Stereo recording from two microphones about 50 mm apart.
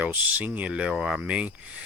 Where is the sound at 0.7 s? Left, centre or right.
Centre.